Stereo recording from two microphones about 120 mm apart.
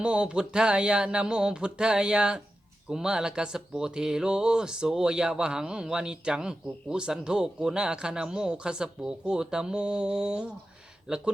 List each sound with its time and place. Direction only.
0.0 s speech: 10° right (ahead or behind)